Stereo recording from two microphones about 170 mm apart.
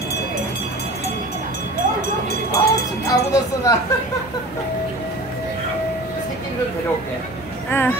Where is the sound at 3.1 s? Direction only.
20° left (ahead or behind).